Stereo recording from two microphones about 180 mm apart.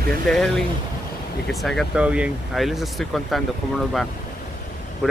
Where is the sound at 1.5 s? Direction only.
Centre (ahead or behind).